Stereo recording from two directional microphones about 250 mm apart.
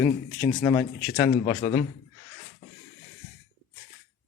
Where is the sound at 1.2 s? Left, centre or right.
Left.